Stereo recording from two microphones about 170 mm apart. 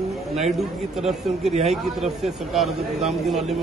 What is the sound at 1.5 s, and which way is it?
Speech, 40° right (ahead or behind).